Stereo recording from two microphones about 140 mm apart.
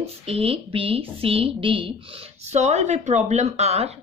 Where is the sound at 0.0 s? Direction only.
45° right (ahead or behind).